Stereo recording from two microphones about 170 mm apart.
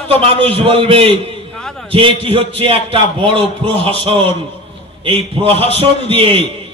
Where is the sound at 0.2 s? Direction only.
35° right (ahead or behind).